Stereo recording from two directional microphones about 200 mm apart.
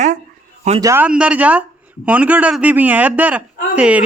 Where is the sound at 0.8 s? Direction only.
10° right (ahead or behind).